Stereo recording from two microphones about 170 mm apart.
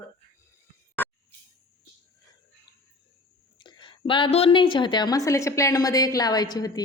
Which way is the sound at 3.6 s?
25° left (ahead or behind).